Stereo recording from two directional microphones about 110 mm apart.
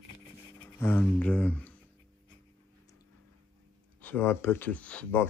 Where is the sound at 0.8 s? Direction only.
20° left (ahead or behind).